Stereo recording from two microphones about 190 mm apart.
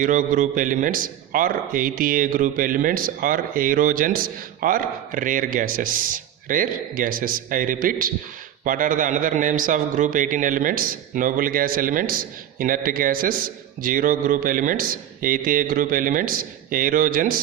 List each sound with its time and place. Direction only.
0.0 s a man's voice: 45° right (ahead or behind)